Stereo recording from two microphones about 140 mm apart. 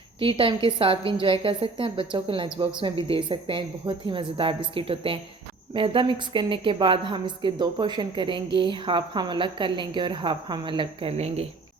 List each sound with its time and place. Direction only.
0.2 s a woman's voice: 40° right (ahead or behind)